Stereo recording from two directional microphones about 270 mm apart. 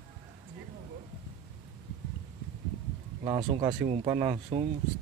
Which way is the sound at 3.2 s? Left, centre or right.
Centre.